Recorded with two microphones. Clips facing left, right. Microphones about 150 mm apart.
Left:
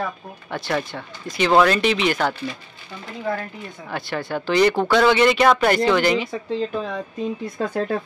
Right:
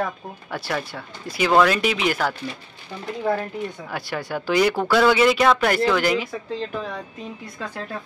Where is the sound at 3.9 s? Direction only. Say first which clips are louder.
Left 7 dB; 10° right (ahead or behind).